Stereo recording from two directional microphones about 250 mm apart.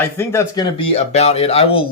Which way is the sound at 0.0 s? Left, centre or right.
Centre.